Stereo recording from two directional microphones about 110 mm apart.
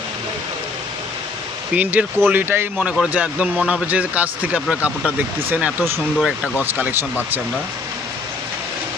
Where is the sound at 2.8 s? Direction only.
10° right (ahead or behind).